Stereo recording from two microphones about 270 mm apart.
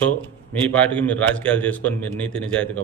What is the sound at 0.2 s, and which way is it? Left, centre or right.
A man's voice, centre.